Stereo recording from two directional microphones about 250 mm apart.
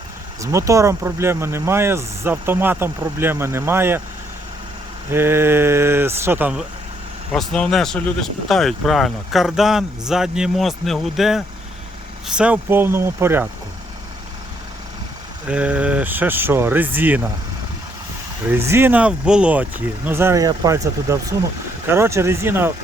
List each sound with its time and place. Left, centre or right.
0.4 s speech: centre
5.1 s speech: centre
15.4 s speech: centre
18.5 s speech: centre